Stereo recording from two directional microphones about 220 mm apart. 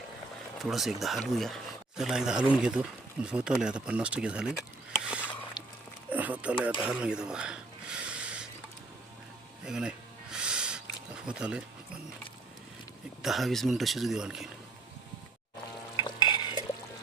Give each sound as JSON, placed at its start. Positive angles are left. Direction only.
{"t": 0.6, "sound": "speech", "side_deg": 0}
{"t": 5.0, "sound": "a sound", "side_deg": -5}
{"t": 5.6, "sound": "a sound", "side_deg": 20}
{"t": 6.1, "sound": "a sound", "side_deg": -5}
{"t": 9.6, "sound": "speech", "side_deg": -5}
{"t": 10.3, "sound": "music", "side_deg": -5}
{"t": 11.3, "sound": "speech", "side_deg": -5}
{"t": 13.2, "sound": "speech", "side_deg": 0}
{"t": 16.0, "sound": "liquid", "side_deg": 20}